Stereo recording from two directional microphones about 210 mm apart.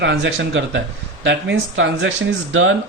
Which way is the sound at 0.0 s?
60° right (ahead or behind).